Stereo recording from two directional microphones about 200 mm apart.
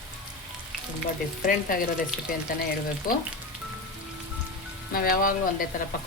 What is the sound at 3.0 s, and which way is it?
Speech, 45° left (ahead or behind).